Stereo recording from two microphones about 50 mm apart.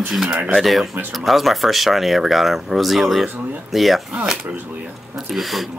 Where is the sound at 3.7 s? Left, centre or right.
Centre.